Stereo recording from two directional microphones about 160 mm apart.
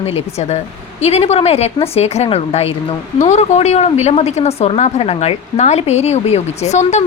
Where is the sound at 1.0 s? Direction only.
40° left (ahead or behind).